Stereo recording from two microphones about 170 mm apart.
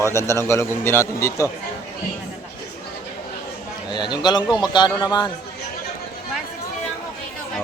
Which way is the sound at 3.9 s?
25° left (ahead or behind).